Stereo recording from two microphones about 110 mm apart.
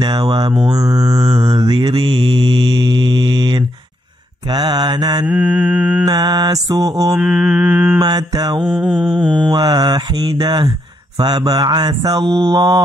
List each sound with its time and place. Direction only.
0.0 s mantra: 40° right (ahead or behind)
5.2 s mantra: 10° right (ahead or behind)
6.0 s mantra: 40° right (ahead or behind)
7.2 s mantra: 10° right (ahead or behind)
8.0 s mantra: 35° right (ahead or behind)
8.6 s mantra: 5° right (ahead or behind)
9.5 s mantra: 35° right (ahead or behind)